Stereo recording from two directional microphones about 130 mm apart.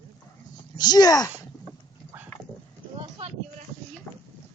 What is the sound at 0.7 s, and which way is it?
Speech, 30° left (ahead or behind).